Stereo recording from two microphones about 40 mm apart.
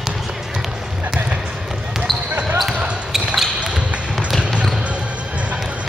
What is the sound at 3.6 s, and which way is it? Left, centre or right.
Basketball bounce, right.